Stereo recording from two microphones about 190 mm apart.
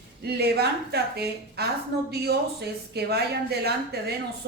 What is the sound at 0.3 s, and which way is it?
A woman's voice, 55° right (ahead or behind).